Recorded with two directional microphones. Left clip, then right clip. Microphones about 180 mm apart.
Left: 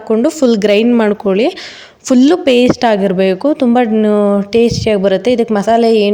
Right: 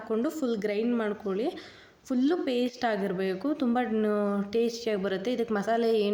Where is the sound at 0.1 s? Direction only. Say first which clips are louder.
Left 18 dB; 35° left (ahead or behind).